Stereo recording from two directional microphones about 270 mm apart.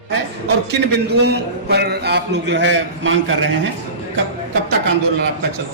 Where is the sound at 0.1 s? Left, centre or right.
Right.